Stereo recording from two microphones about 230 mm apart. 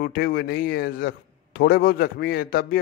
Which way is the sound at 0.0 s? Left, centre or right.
Left.